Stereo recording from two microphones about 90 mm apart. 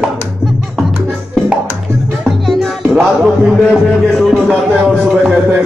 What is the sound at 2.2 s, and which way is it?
Music, centre (ahead or behind).